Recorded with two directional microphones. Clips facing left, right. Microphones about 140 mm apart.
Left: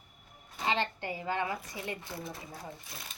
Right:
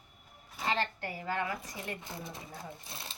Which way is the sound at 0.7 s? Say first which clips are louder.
Left 1 dB; 20° left (ahead or behind).